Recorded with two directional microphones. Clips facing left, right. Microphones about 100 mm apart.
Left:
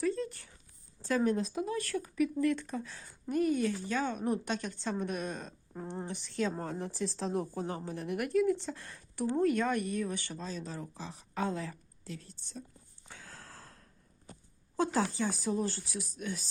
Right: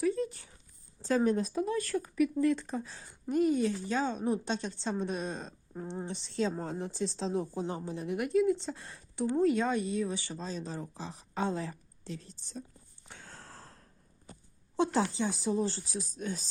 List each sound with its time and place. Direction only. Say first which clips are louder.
0.0 s a sound: right 2 dB; 15° right (ahead or behind)
1.0 s a woman's voice: right 2 dB; 30° right (ahead or behind)
2.4 s speech: right 2 dB; 25° right (ahead or behind)
10.3 s a woman's voice: right 2 dB; 35° right (ahead or behind)
14.9 s speech: right 1 dB; 20° right (ahead or behind)